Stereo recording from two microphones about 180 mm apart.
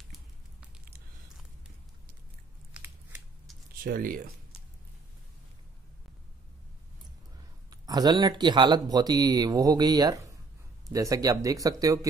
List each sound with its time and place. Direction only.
2.7 s scissors: 10° right (ahead or behind)
3.8 s speech: 50° right (ahead or behind)
7.8 s speech: 20° right (ahead or behind)